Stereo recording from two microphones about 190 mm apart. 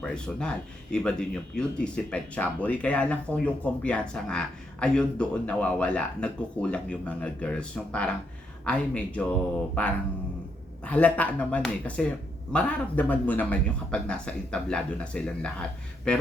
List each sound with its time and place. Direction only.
0.0 s speech: 5° left (ahead or behind)